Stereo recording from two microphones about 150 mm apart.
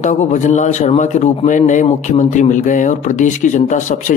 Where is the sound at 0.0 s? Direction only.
55° left (ahead or behind).